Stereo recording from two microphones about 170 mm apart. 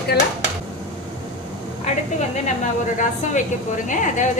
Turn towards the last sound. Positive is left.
turn(degrees=50)  # may be behind; listen again after turning